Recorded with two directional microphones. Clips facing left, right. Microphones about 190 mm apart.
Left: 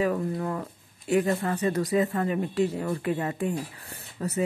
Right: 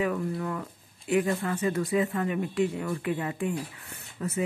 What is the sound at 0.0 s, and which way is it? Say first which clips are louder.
Speech: left 2 dB; 35° left (ahead or behind).